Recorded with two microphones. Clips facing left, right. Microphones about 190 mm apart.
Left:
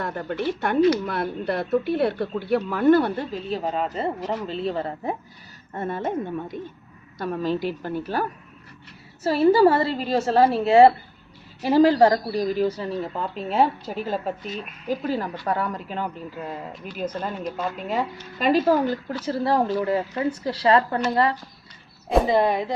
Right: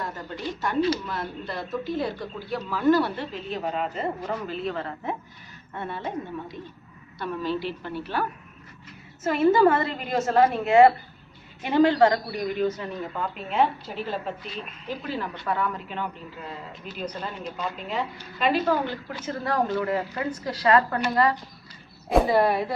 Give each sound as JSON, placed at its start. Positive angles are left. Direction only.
{"t": 0.0, "sound": "a woman's voice", "side_deg": 60}
{"t": 18.3, "sound": "a woman's voice", "side_deg": 40}